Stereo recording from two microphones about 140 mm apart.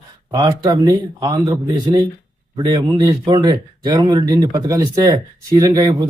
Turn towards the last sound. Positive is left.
turn(degrees=-25)  # may be behind; listen again after turning